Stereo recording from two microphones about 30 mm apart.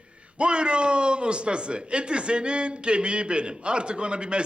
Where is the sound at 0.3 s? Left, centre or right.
Right.